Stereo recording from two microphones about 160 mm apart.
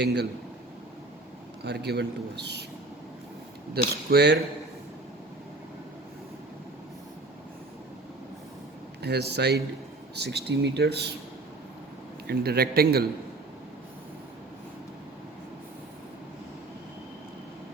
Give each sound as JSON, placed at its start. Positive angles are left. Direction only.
{"t": 0.0, "sound": "a man's voice", "side_deg": -90}
{"t": 1.6, "sound": "a man's voice", "side_deg": -90}
{"t": 3.8, "sound": "a man's voice", "side_deg": -75}
{"t": 4.1, "sound": "a man's voice", "side_deg": -90}
{"t": 9.0, "sound": "a man's voice", "side_deg": -90}
{"t": 12.3, "sound": "a man's voice", "side_deg": -80}